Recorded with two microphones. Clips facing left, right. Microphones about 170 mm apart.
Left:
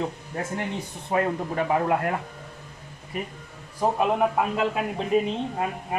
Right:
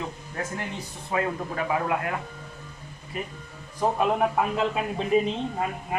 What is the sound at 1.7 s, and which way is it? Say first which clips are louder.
Speech: left 3 dB; 40° left (ahead or behind).